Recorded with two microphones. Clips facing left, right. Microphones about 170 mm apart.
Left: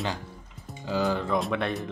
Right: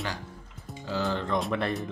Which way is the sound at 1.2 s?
Centre (ahead or behind).